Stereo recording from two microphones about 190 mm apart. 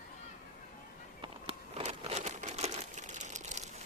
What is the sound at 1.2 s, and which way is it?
Crumpling, 30° right (ahead or behind).